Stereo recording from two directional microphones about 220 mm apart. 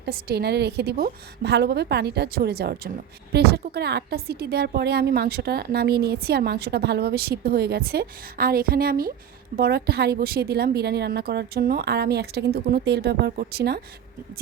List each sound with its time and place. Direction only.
0.0 s a woman's voice: 45° right (ahead or behind)